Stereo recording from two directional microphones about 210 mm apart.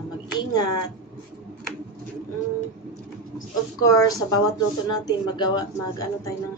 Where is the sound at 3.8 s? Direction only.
15° left (ahead or behind).